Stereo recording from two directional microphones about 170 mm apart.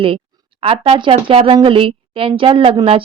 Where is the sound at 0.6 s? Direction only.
30° right (ahead or behind).